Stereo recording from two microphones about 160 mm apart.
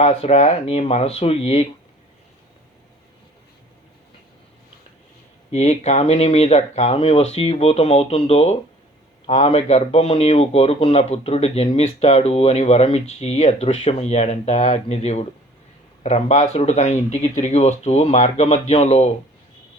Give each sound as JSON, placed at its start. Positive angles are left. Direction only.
{"t": 0.0, "sound": "speech", "side_deg": 40}
{"t": 5.5, "sound": "speech", "side_deg": 45}